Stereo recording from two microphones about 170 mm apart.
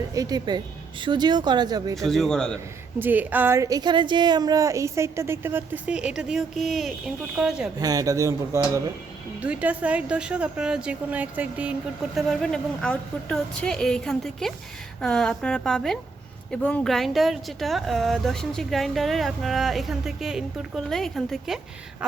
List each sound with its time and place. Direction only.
0.1 s speech: 20° right (ahead or behind)
2.0 s speech: centre (ahead or behind)
3.0 s speech: 10° right (ahead or behind)
7.8 s speech: 20° right (ahead or behind); by 21.6 s centre (ahead or behind)